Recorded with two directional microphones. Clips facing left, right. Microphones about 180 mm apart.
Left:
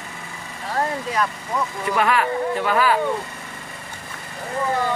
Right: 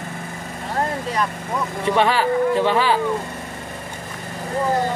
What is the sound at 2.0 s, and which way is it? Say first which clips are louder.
Speech: right 2 dB; 30° right (ahead or behind).